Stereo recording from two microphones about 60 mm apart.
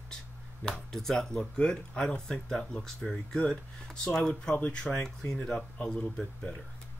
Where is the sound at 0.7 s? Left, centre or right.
Centre.